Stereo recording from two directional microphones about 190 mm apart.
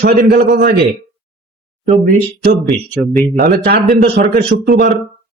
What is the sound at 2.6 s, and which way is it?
Speech, centre (ahead or behind).